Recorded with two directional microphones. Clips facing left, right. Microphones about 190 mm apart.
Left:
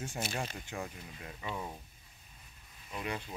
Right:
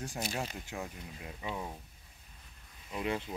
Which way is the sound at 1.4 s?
15° right (ahead or behind).